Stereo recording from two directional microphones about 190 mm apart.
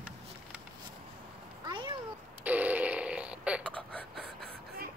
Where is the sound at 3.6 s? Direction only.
5° left (ahead or behind).